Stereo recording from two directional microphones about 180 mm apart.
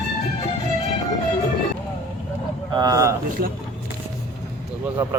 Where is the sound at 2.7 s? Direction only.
20° right (ahead or behind).